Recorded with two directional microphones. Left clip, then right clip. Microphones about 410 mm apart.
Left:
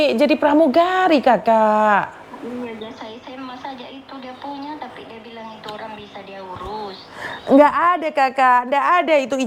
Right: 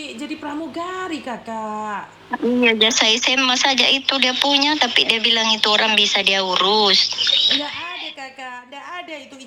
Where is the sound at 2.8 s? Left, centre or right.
Right.